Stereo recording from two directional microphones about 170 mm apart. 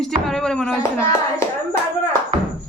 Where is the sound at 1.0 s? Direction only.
15° left (ahead or behind).